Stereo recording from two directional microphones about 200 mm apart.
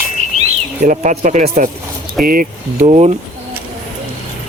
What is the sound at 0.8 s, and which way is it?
Speech, 40° right (ahead or behind).